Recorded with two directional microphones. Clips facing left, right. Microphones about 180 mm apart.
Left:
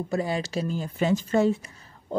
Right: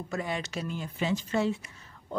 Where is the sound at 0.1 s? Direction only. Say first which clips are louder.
Left 5 dB; 35° left (ahead or behind).